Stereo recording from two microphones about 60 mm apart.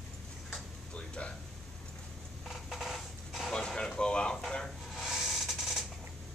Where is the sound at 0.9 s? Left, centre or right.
Centre.